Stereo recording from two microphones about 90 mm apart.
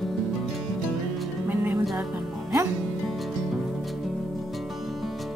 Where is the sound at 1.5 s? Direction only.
25° right (ahead or behind).